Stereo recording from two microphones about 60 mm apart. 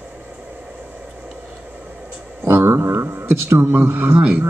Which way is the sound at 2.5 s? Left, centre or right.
Right.